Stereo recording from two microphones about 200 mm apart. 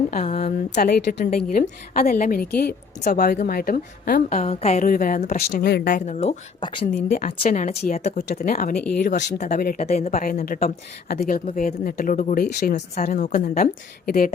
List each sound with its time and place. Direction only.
0.2 s speech: 30° left (ahead or behind)
0.8 s speech: 50° left (ahead or behind)
4.3 s speech: 35° left (ahead or behind)
5.4 s speech: 50° left (ahead or behind); by 6.8 s 25° left (ahead or behind)
6.9 s speech: 35° left (ahead or behind)
10.1 s speech: 45° left (ahead or behind)